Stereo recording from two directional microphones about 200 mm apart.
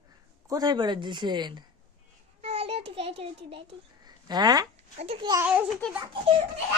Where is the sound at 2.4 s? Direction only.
30° right (ahead or behind).